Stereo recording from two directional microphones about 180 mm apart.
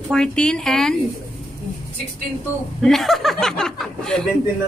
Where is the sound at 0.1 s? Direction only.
5° left (ahead or behind).